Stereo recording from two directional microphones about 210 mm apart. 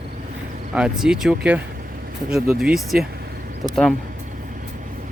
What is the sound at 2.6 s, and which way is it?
Speech, centre (ahead or behind).